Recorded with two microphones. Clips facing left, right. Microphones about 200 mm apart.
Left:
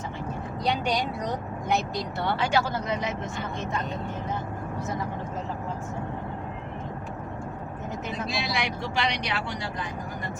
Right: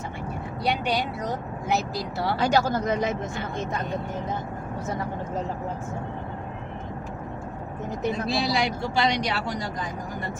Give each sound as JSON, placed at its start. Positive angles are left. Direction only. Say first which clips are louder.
{"t": 0.6, "sound": "speech", "louder": "right 1 dB", "side_deg": -5}
{"t": 2.3, "sound": "speech", "louder": "right 4 dB", "side_deg": -40}
{"t": 8.3, "sound": "speech", "louder": "right 3 dB", "side_deg": -35}